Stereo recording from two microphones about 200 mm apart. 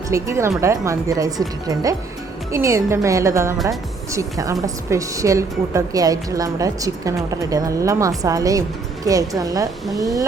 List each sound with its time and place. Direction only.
0.1 s a woman's voice: 15° right (ahead or behind)